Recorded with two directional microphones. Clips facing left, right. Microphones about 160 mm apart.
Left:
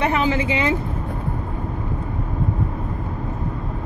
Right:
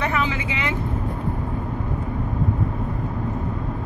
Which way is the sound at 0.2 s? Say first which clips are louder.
Left 5 dB; 35° left (ahead or behind).